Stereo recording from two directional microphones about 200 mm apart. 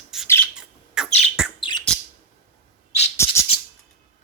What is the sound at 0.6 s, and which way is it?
Bird, 5° right (ahead or behind).